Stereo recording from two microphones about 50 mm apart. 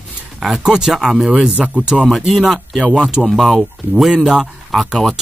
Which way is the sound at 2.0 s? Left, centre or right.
Centre.